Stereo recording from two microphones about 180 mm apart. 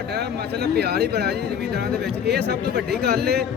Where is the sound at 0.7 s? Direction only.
65° right (ahead or behind).